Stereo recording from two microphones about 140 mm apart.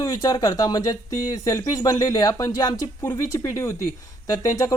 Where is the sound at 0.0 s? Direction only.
25° left (ahead or behind).